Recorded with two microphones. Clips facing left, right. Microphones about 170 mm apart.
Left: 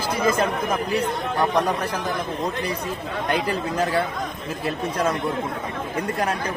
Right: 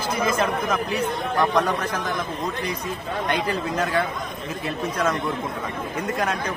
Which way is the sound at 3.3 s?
35° left (ahead or behind).